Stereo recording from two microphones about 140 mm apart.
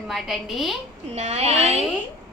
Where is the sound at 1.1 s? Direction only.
50° right (ahead or behind).